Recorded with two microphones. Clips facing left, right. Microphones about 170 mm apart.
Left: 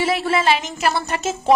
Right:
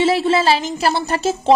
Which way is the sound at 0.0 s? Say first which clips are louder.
Right 4 dB; 25° right (ahead or behind).